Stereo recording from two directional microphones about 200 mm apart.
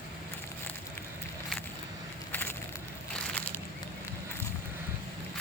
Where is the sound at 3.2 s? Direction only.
5° left (ahead or behind).